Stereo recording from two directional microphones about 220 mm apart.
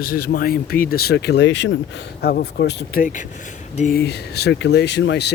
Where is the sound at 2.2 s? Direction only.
45° left (ahead or behind).